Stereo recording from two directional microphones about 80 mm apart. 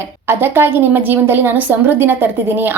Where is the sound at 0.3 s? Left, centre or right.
Right.